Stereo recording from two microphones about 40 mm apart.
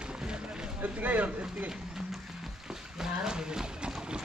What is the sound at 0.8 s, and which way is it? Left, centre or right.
Speech, right.